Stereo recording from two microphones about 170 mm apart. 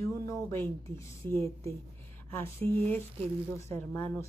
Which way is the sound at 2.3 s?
15° left (ahead or behind).